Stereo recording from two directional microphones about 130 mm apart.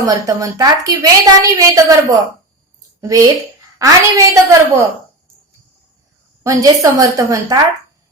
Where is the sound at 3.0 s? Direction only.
25° right (ahead or behind).